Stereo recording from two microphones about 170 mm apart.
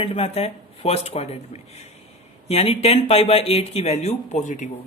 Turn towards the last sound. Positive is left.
turn(degrees=45)  # may be behind; listen again after turning